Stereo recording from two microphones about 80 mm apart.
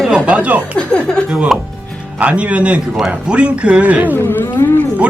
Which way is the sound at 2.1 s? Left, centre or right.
Centre.